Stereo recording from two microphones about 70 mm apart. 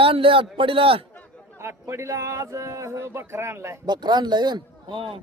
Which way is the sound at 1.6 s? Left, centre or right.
Right.